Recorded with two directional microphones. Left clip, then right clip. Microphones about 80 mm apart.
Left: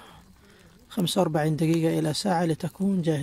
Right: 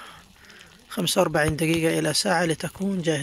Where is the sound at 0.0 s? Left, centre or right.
Left.